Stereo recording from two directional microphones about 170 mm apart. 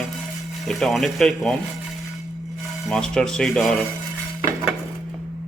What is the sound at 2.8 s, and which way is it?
Speech, 5° left (ahead or behind).